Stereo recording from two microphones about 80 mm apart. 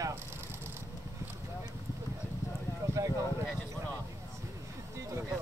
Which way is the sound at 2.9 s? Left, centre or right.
Right.